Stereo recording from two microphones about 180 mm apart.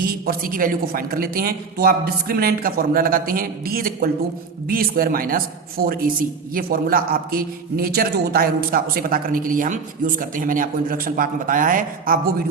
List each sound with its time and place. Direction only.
0.0 s a man's voice: 55° right (ahead or behind)